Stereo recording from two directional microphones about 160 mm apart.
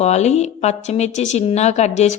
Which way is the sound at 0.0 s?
45° left (ahead or behind).